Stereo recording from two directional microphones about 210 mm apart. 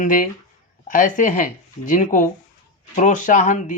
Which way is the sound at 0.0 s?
40° left (ahead or behind).